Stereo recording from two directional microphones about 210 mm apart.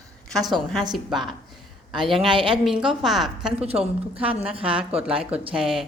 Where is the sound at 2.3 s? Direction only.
25° right (ahead or behind).